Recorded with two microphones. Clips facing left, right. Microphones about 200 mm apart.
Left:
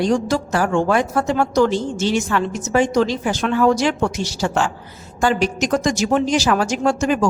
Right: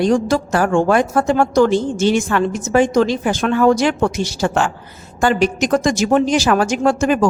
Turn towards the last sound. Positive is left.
turn(degrees=-55)  # may be behind; listen again after turning